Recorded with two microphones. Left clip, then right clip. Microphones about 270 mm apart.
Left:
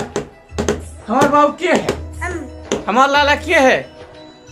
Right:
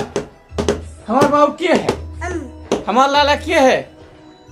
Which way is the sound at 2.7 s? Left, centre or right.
Centre.